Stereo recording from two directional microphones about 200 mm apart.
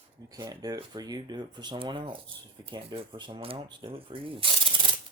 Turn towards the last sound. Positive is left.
turn(degrees=-25)  # may be behind; listen again after turning